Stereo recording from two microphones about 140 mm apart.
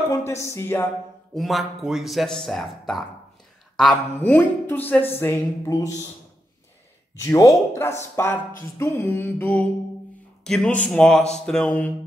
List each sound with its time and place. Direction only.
0.3 s music: 20° left (ahead or behind)
1.3 s speech: centre (ahead or behind); by 5.9 s 20° left (ahead or behind)
7.2 s speech: 25° left (ahead or behind)